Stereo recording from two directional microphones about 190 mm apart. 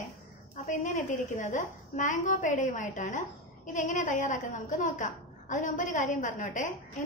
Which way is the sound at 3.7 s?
40° left (ahead or behind).